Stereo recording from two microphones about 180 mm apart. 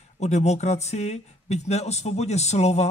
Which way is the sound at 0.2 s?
40° left (ahead or behind).